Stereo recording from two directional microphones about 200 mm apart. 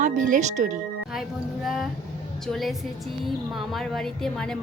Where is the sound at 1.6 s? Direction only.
Centre (ahead or behind).